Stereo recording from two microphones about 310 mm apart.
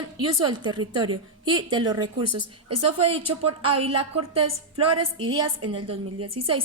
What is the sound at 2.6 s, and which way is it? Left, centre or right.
Speech, right.